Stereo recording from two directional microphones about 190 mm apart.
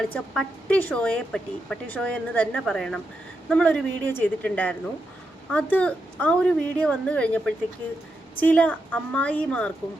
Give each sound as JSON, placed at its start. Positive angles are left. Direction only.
{"t": 0.0, "sound": "a woman's voice", "side_deg": 5}